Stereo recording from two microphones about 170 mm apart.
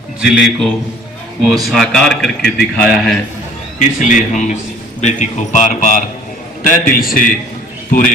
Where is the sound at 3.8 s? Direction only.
45° left (ahead or behind).